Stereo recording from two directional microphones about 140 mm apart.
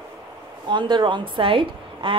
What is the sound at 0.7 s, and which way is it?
A woman's voice, 35° right (ahead or behind).